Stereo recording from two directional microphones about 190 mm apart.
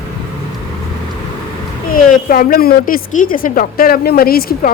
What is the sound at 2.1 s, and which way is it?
A woman's voice, 50° left (ahead or behind).